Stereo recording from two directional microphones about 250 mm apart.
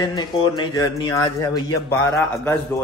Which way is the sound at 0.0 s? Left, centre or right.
Centre.